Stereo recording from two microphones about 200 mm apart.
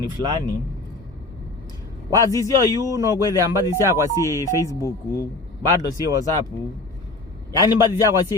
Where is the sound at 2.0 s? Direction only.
15° left (ahead or behind).